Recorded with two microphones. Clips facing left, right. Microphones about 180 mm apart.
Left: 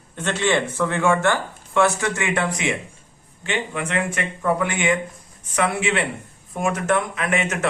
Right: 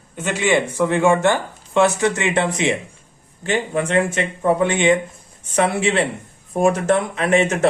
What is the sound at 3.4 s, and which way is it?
Speech, 35° right (ahead or behind).